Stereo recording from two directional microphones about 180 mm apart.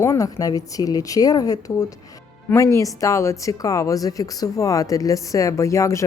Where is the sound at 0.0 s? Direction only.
20° left (ahead or behind).